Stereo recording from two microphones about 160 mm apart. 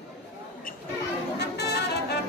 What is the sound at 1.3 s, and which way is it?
Brass instrument, 90° left.